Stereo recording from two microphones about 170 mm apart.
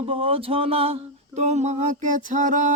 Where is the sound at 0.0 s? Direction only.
35° right (ahead or behind).